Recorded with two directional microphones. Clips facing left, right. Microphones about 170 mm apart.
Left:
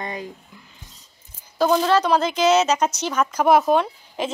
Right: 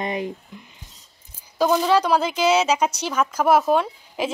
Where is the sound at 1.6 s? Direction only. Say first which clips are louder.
Even; 10° right (ahead or behind).